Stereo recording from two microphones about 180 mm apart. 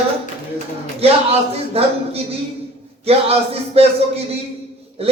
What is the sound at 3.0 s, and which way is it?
Speech, 35° right (ahead or behind).